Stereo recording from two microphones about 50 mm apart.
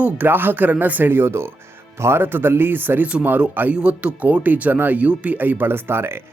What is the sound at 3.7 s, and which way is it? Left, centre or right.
Speech, right.